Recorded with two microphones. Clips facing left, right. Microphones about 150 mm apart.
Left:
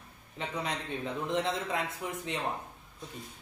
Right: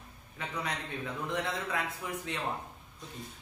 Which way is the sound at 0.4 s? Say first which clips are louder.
Left 2 dB; 25° left (ahead or behind).